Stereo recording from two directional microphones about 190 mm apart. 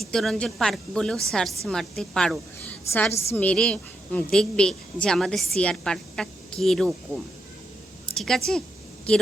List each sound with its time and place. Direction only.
0.0 s a woman's voice: centre (ahead or behind)
3.1 s a woman's voice: 35° left (ahead or behind)
3.3 s a woman's voice: 5° left (ahead or behind)
8.1 s a woman's voice: centre (ahead or behind)